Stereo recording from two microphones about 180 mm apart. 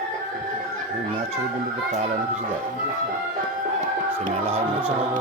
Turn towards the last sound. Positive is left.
turn(degrees=-35)  # may be behind; listen again after turning